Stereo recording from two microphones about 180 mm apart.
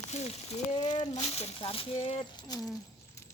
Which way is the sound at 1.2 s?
35° left (ahead or behind).